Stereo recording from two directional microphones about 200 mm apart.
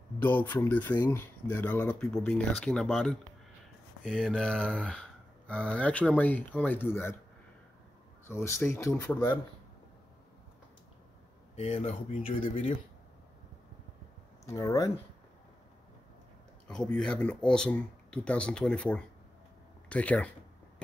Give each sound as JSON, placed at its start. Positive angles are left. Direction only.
{"t": 0.2, "sound": "speech", "side_deg": 10}
{"t": 8.3, "sound": "speech", "side_deg": 15}
{"t": 11.5, "sound": "speech", "side_deg": 35}
{"t": 14.4, "sound": "speech", "side_deg": 15}
{"t": 16.6, "sound": "speech", "side_deg": 5}